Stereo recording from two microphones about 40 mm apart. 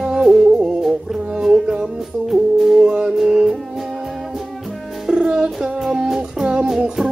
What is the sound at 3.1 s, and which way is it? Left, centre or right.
Music, centre.